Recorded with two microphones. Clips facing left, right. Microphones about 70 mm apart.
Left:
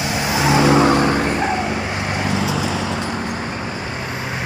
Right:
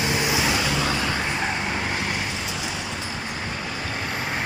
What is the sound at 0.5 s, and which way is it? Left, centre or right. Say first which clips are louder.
Vehicle: left 11 dB; left.